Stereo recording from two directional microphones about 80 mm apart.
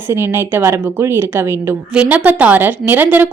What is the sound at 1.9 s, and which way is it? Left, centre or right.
A woman's voice, centre.